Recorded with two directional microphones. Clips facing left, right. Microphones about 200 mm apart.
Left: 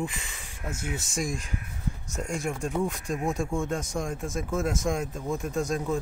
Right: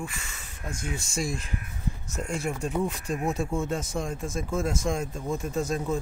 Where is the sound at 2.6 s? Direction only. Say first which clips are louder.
Even; centre (ahead or behind).